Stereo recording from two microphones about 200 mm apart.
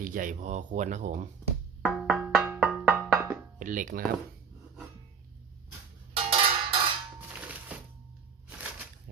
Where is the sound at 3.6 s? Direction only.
40° right (ahead or behind).